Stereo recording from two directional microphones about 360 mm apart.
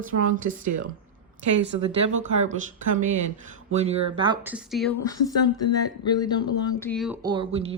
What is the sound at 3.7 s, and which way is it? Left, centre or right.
A woman's voice, centre.